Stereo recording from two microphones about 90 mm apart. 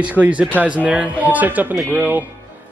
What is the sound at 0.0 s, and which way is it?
A man's voice, 15° right (ahead or behind).